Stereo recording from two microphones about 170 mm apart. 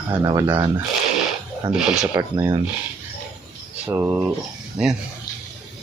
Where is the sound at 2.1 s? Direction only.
20° right (ahead or behind).